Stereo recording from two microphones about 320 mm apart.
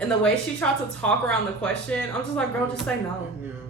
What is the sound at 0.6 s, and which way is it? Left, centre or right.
A woman's voice, centre.